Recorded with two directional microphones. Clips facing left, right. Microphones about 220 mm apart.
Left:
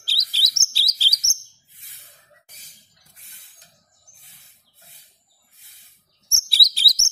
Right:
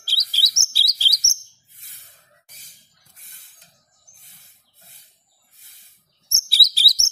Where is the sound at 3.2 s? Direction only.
45° right (ahead or behind).